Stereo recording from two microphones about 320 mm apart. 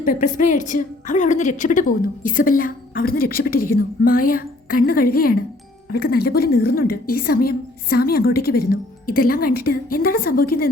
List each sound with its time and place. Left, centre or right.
0.0 s a woman's voice: left